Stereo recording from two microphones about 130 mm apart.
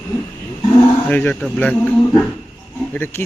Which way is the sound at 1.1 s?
10° left (ahead or behind).